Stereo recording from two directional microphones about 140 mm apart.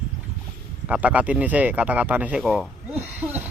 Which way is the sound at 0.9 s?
10° right (ahead or behind).